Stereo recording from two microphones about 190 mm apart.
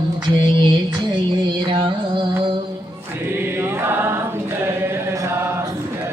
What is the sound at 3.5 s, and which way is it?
Chant, 10° right (ahead or behind).